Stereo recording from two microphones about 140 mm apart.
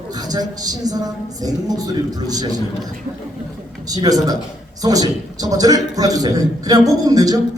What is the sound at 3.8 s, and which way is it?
A man's voice, 30° right (ahead or behind).